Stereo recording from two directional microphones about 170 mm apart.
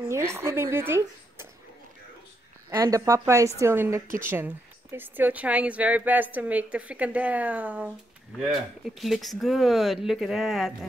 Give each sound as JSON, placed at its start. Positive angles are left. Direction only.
{"t": 0.1, "sound": "speech", "side_deg": -15}
{"t": 2.7, "sound": "speech", "side_deg": -20}